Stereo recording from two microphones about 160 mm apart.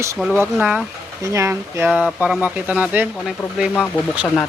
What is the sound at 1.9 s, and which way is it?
Speech, 5° right (ahead or behind).